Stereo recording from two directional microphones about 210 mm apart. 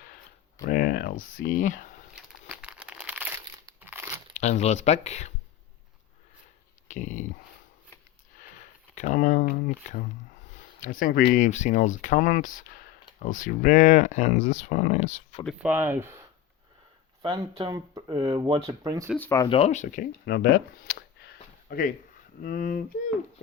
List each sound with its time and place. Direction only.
0.6 s speech: 45° left (ahead or behind)
2.1 s crumpling: 5° right (ahead or behind)
4.4 s speech: 30° left (ahead or behind)
6.8 s dog: 35° left (ahead or behind)
9.0 s speech: 35° left (ahead or behind)
15.4 s speech: 5° right (ahead or behind)
17.2 s speech: 25° right (ahead or behind)
19.1 s speech: 10° left (ahead or behind)
19.5 s speech: 30° left (ahead or behind)
20.2 s speech: 50° left (ahead or behind)